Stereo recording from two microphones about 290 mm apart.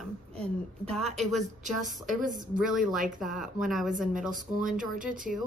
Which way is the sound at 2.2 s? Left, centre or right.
Right.